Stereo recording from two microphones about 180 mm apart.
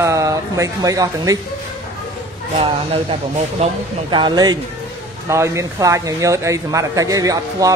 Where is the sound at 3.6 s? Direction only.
25° right (ahead or behind).